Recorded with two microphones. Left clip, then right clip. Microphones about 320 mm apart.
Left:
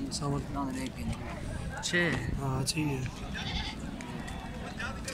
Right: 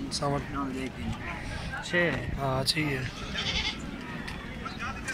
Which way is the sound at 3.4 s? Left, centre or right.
Left.